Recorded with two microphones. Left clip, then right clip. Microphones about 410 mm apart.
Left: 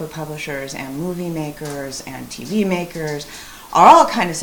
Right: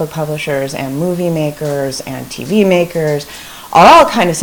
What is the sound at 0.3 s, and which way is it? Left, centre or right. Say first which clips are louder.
Speech: right 9 dB; right.